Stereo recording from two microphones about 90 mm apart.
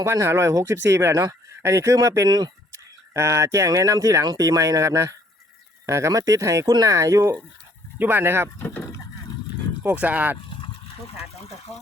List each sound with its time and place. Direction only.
0.0 s speech: 30° right (ahead or behind)
3.1 s speech: 30° right (ahead or behind)
6.7 s speech: 50° right (ahead or behind)
6.9 s speech: 35° right (ahead or behind)
7.9 s speech: 25° right (ahead or behind)
8.5 s speech: 20° left (ahead or behind)
9.8 s speech: 15° right (ahead or behind)
10.5 s a sound: 75° left (ahead or behind)
11.7 s speech: 5° left (ahead or behind)